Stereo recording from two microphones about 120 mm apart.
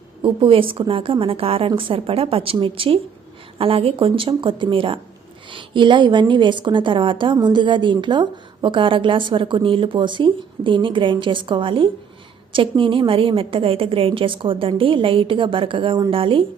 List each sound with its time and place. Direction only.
0.2 s a woman's voice: 50° right (ahead or behind)